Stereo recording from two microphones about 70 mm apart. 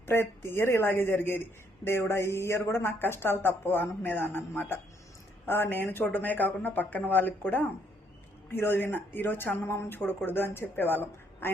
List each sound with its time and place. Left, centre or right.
0.1 s speech: left
9.6 s speech: left